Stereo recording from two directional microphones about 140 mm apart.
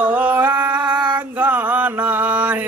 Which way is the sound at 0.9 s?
30° right (ahead or behind).